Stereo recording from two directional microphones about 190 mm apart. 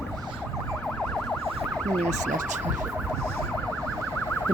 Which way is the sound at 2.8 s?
10° right (ahead or behind).